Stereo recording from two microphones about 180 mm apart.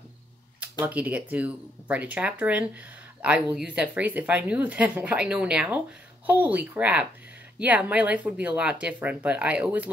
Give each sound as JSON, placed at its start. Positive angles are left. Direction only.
{"t": 0.6, "sound": "speech", "side_deg": -10}